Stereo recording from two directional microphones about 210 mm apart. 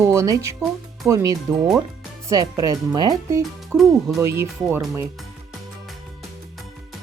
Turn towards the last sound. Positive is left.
turn(degrees=-10)  # may be behind; listen again after turning